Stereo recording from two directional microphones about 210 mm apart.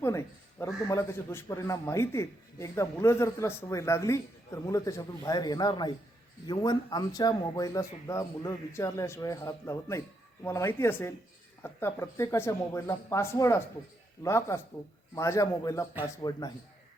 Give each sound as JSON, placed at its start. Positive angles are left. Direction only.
{"t": 0.0, "sound": "a man's voice", "side_deg": 15}